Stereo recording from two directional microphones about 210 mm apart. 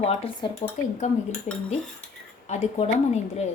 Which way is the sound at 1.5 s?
35° left (ahead or behind).